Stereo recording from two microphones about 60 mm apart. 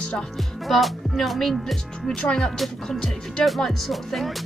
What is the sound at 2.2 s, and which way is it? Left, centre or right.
Speech, centre.